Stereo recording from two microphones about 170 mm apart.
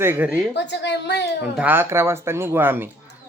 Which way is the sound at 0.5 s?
90° left.